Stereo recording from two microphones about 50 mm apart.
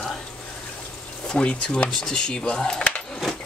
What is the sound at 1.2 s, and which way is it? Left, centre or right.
Speech, centre.